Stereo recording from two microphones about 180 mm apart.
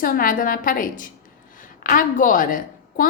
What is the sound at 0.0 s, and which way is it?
A woman's voice, 50° left (ahead or behind).